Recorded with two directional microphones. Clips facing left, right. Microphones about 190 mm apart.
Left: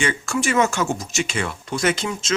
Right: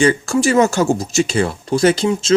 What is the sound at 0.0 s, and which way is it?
Speech, 35° right (ahead or behind).